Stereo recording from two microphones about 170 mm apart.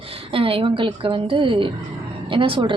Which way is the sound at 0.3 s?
35° right (ahead or behind).